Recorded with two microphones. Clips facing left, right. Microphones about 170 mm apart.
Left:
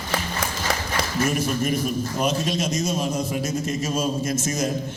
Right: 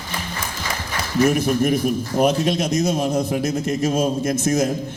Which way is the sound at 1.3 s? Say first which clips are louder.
Right 7 dB; 60° right (ahead or behind).